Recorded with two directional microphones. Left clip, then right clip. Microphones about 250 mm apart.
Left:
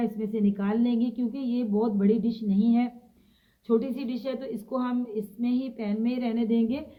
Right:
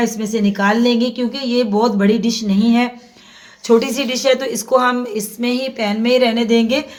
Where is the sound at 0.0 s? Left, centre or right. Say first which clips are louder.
Right 10 dB; right.